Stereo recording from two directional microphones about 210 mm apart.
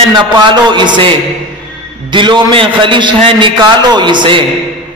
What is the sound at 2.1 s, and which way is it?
A man's voice, 25° right (ahead or behind).